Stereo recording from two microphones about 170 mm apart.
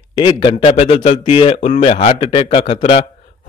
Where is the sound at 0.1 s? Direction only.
30° left (ahead or behind).